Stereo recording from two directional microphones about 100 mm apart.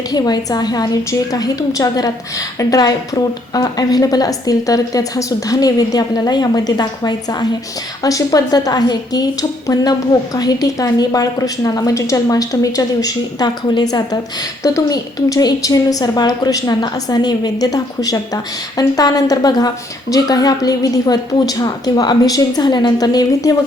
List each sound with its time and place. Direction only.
0.1 s speech: 40° left (ahead or behind)